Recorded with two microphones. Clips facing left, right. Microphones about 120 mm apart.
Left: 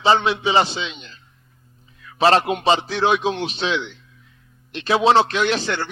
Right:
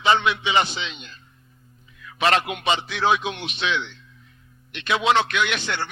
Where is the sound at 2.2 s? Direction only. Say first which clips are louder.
Left 5 dB; 30° left (ahead or behind).